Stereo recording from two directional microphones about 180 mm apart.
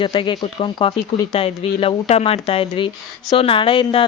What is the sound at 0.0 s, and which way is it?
A woman's voice, 25° left (ahead or behind).